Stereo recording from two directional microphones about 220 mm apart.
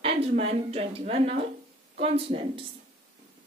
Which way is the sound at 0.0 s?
25° right (ahead or behind).